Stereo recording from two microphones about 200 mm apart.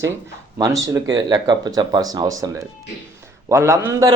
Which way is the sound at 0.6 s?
15° right (ahead or behind).